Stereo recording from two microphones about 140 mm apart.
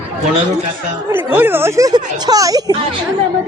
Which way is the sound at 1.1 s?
15° right (ahead or behind).